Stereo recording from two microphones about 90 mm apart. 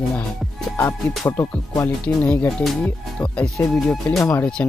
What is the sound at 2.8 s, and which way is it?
Speech, 10° left (ahead or behind).